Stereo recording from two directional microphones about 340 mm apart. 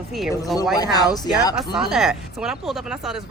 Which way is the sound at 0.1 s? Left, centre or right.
Centre.